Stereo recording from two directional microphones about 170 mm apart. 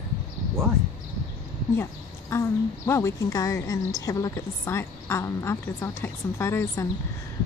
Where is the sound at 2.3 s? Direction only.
15° left (ahead or behind).